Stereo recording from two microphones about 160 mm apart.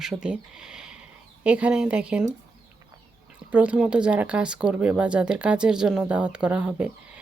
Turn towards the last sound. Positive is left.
turn(degrees=-10)  # may be behind; listen again after turning